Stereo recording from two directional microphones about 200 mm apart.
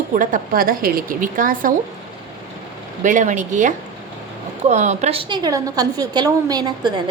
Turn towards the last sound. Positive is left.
turn(degrees=-20)  # may be behind; listen again after turning